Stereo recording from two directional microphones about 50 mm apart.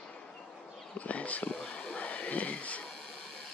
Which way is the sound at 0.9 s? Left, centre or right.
Left.